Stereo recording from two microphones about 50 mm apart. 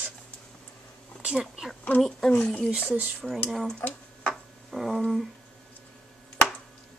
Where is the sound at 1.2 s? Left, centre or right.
Centre.